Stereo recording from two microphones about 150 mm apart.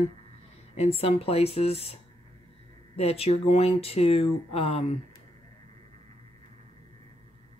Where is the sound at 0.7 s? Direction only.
40° left (ahead or behind).